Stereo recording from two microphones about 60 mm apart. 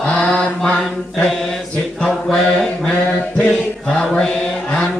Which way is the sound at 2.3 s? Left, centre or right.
Centre.